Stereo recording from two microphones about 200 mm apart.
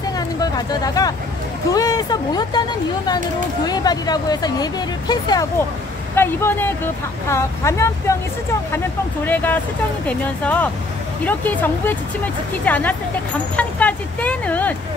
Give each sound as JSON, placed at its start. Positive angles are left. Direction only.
{"t": 0.4, "sound": "speech", "side_deg": 20}
{"t": 3.6, "sound": "speech", "side_deg": 20}